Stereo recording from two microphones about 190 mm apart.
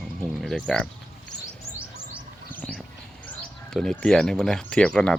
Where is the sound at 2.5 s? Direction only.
10° left (ahead or behind).